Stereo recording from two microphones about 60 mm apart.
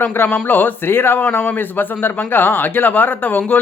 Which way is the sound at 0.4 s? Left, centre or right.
Left.